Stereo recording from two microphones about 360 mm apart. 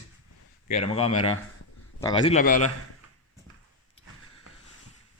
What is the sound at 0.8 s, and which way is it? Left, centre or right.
Speech, centre.